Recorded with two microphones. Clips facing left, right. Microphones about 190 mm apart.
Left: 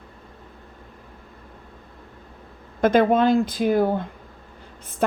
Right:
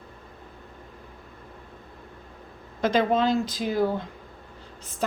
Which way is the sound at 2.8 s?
55° left (ahead or behind).